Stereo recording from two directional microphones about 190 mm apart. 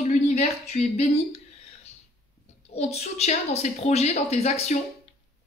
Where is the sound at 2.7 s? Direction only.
35° left (ahead or behind).